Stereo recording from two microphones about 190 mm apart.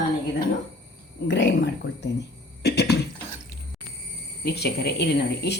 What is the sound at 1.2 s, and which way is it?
Speech, 70° left (ahead or behind).